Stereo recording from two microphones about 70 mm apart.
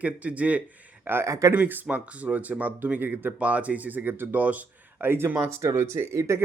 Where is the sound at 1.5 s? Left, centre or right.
Right.